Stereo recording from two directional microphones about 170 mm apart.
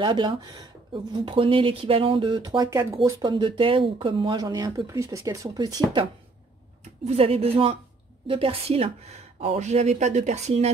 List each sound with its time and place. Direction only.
0.0 s speech: 30° right (ahead or behind)
6.8 s a woman's voice: 40° right (ahead or behind)